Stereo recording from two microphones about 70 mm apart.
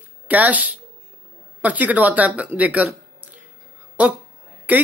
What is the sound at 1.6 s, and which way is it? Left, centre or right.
Speech, right.